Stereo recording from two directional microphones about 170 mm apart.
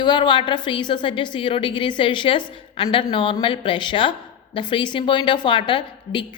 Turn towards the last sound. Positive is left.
turn(degrees=30)  # may be behind; listen again after turning